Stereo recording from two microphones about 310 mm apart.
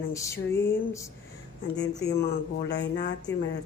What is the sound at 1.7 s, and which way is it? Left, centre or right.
Speech, left.